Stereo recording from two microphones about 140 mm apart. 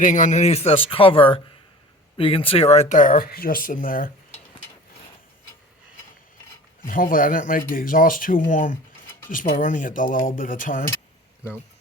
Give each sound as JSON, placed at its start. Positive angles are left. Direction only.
{"t": 0.0, "sound": "speech", "side_deg": 65}
{"t": 6.8, "sound": "speech", "side_deg": 80}